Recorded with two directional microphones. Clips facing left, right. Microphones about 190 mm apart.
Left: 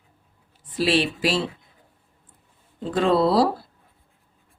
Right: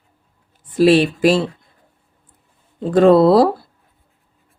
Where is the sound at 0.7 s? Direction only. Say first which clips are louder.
Right 9 dB; 50° right (ahead or behind).